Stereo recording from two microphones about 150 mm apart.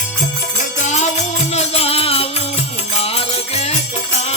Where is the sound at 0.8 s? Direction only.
50° left (ahead or behind).